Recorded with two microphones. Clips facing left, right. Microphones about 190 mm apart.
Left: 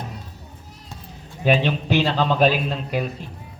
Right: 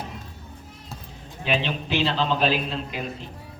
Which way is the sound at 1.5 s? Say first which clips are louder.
Left 6 dB; 45° left (ahead or behind).